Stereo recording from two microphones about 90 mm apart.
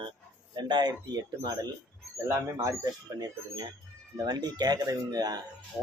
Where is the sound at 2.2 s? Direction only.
35° right (ahead or behind).